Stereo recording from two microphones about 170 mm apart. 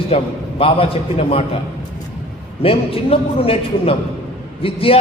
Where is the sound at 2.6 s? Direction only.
35° left (ahead or behind).